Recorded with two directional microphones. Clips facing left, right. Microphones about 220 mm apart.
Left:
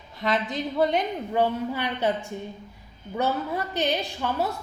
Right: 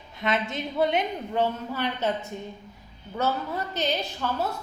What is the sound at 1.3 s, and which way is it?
Speech, 15° left (ahead or behind).